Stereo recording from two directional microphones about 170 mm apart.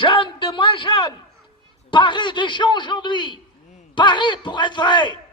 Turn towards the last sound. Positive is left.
turn(degrees=25)  # may be behind; listen again after turning